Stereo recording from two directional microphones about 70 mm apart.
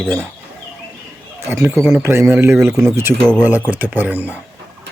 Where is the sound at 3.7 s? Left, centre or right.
Right.